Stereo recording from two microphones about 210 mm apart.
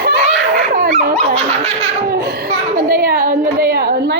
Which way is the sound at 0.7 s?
45° right (ahead or behind).